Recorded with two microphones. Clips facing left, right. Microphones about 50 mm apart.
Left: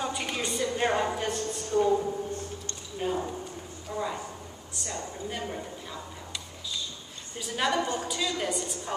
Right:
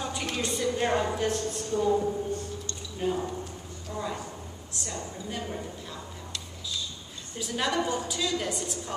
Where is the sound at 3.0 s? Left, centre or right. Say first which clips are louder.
Right 1 dB; centre.